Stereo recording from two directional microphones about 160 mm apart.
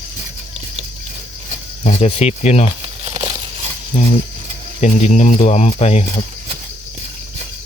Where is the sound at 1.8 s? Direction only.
45° left (ahead or behind).